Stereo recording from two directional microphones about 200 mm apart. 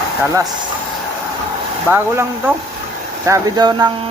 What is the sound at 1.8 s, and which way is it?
Speech, 10° right (ahead or behind).